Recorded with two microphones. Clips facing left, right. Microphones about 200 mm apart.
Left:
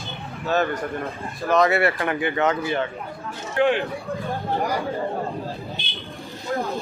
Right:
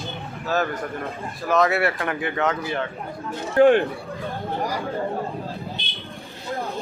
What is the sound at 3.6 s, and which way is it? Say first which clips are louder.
Speech: right 5 dB; 45° right (ahead or behind).